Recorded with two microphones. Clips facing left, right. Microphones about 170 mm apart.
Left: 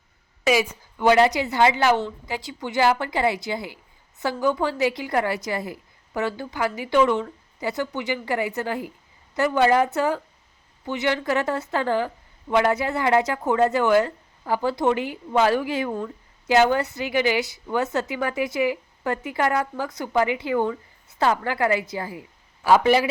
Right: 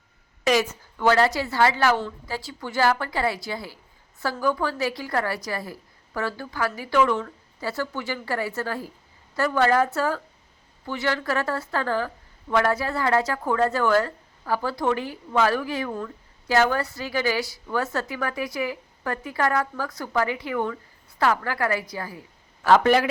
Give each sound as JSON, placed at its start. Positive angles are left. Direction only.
{"t": 0.4, "sound": "a woman's voice", "side_deg": 10}
{"t": 22.6, "sound": "a man's voice", "side_deg": 10}